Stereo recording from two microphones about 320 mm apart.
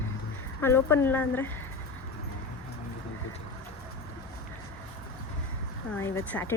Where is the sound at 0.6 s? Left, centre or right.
Centre.